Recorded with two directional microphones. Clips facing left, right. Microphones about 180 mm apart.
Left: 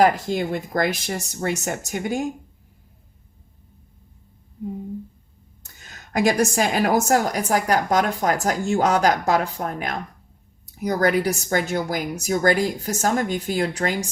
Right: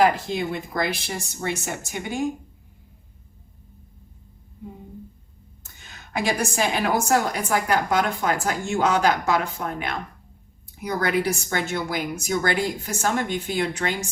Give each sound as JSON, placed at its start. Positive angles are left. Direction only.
{"t": 0.0, "sound": "speech", "side_deg": 45}
{"t": 5.6, "sound": "a woman's voice", "side_deg": 40}